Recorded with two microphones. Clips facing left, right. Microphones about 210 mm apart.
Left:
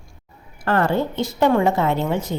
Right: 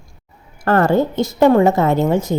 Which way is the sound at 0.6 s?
45° right (ahead or behind).